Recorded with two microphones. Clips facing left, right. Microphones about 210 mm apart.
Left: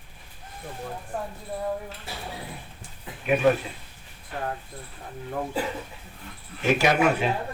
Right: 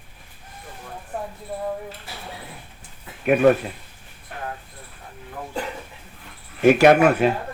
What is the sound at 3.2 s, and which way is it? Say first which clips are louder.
Speech: right 5 dB; 55° right (ahead or behind).